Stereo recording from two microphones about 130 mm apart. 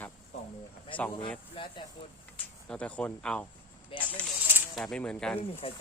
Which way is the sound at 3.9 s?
40° left (ahead or behind).